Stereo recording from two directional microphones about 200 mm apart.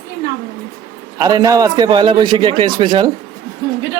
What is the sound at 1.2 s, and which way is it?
A man's voice, 20° right (ahead or behind).